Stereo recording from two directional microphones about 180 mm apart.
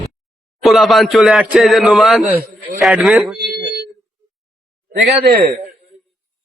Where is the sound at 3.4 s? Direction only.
60° right (ahead or behind).